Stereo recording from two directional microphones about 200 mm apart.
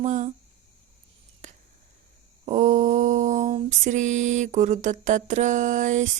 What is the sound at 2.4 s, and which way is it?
Mantra, 35° right (ahead or behind).